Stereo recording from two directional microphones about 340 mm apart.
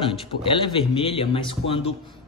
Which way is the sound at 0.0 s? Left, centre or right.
Centre.